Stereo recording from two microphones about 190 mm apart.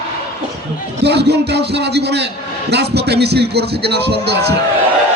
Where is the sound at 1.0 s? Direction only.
60° right (ahead or behind).